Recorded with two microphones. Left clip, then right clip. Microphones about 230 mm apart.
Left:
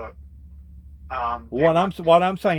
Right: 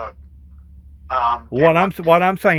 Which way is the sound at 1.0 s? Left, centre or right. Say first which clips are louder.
Right 8 dB; right.